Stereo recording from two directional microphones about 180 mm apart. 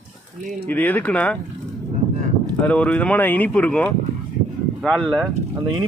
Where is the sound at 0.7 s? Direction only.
10° left (ahead or behind).